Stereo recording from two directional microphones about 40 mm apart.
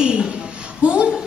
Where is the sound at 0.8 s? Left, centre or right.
Right.